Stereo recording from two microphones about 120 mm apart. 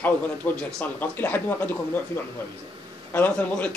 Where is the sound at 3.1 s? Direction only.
15° left (ahead or behind).